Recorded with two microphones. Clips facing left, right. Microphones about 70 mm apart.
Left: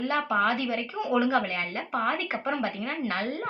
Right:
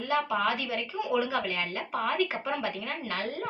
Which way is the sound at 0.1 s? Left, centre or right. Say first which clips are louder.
Left 1 dB; left.